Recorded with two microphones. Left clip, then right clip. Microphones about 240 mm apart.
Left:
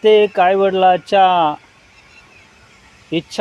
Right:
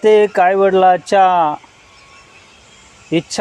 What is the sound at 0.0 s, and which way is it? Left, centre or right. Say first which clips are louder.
Speech: right 1 dB; right.